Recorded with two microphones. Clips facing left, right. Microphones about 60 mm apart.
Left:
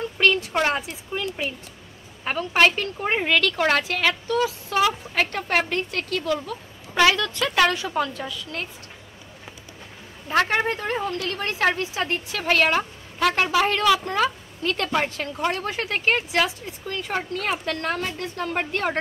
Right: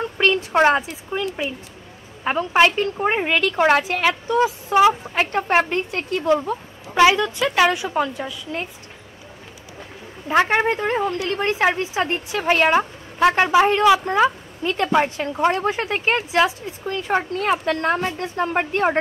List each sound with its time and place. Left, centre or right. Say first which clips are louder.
0.0 s a sound: right 1 dB; right
2.2 s a woman's voice: right 3 dB; centre
10.4 s speech: right 4 dB; right